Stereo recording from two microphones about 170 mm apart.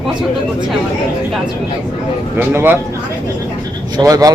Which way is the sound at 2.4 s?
10° right (ahead or behind).